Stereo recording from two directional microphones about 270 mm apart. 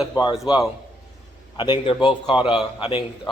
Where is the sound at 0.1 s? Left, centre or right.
Centre.